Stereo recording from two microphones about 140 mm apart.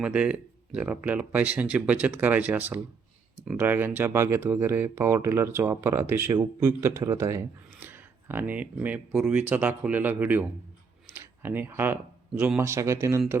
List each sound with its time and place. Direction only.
0.0 s speech: 10° right (ahead or behind)